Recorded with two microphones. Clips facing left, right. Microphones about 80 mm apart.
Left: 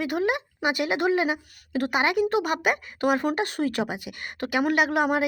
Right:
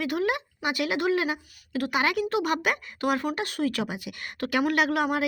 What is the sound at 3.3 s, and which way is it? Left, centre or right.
Speech, left.